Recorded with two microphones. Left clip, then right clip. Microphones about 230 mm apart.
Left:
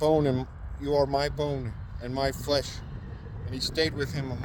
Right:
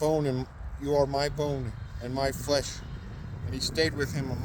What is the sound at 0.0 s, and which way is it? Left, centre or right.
Speech, left.